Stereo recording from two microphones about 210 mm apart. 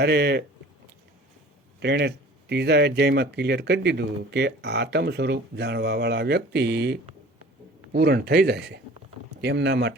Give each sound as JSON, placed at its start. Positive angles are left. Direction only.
{"t": 0.0, "sound": "speech", "side_deg": -55}
{"t": 1.8, "sound": "speech", "side_deg": -55}